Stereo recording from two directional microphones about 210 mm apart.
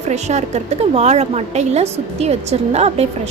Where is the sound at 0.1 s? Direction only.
35° right (ahead or behind).